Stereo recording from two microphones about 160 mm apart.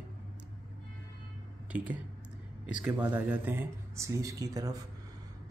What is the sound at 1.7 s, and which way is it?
A man's voice, 10° right (ahead or behind).